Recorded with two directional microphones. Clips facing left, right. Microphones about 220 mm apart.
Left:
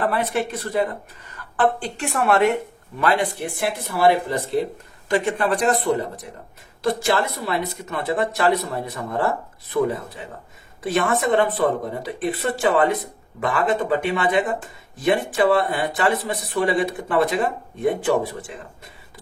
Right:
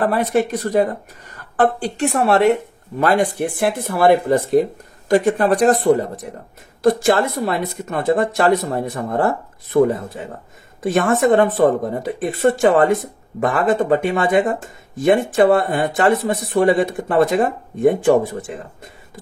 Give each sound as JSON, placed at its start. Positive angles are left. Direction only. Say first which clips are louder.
{"t": 0.0, "sound": "a woman's voice", "louder": "right 5 dB", "side_deg": -40}